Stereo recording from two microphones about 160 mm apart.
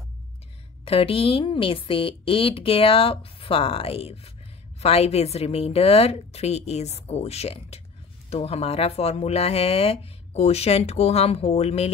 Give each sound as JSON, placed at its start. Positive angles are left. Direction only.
{"t": 0.8, "sound": "speech", "side_deg": 35}